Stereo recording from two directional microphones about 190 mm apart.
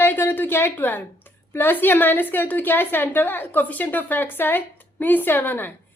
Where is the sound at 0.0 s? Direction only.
10° left (ahead or behind).